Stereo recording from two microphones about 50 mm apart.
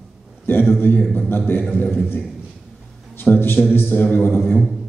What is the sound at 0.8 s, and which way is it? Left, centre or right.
Speech, left.